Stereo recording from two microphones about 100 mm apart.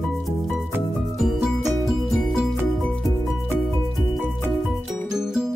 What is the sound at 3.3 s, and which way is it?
Music, centre (ahead or behind).